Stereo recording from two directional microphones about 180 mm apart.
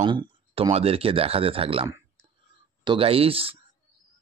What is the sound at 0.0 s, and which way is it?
Speech, 25° right (ahead or behind).